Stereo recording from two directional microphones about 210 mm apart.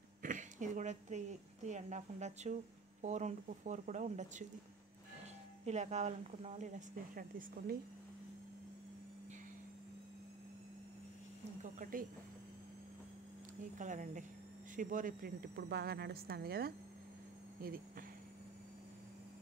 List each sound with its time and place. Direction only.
0.2 s a woman's voice: 35° right (ahead or behind)
5.7 s a woman's voice: 35° right (ahead or behind)
11.6 s a woman's voice: 40° right (ahead or behind)
13.7 s a woman's voice: 35° right (ahead or behind)